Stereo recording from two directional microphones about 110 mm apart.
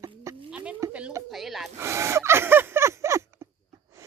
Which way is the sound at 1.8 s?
25° right (ahead or behind).